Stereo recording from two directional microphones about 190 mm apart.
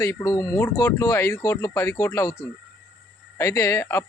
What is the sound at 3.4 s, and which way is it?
Speech, 15° left (ahead or behind).